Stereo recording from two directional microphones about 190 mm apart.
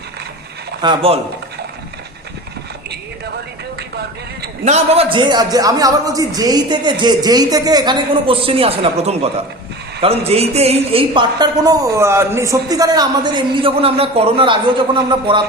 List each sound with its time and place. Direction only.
0.8 s a woman's voice: 25° right (ahead or behind)
4.6 s a woman's voice: 35° right (ahead or behind)